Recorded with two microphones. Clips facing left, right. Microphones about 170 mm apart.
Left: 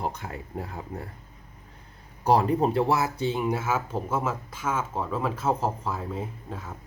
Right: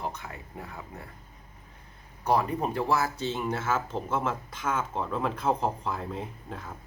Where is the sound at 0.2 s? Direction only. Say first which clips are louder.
Left 6 dB; 35° left (ahead or behind).